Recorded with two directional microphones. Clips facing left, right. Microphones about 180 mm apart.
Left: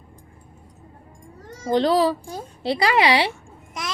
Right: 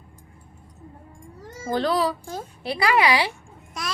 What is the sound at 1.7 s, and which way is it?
A woman's voice, 25° left (ahead or behind).